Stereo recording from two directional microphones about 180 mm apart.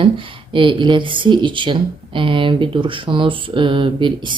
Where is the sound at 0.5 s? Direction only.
30° right (ahead or behind).